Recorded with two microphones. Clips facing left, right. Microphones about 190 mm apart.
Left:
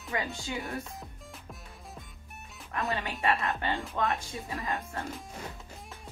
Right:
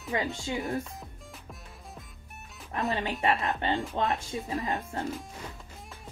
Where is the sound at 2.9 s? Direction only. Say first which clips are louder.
Right 2 dB; 20° right (ahead or behind).